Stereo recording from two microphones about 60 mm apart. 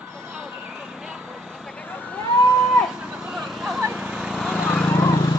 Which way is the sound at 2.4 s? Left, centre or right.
Centre.